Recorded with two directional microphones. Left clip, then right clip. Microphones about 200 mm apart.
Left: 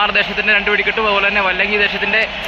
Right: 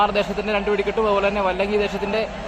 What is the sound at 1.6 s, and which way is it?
Speech, 15° right (ahead or behind).